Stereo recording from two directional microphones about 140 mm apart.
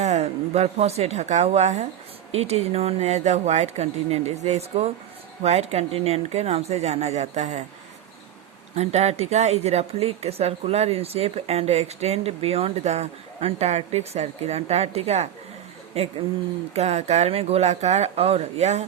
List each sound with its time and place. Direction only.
0.0 s speech: 50° right (ahead or behind)
8.7 s speech: 50° right (ahead or behind)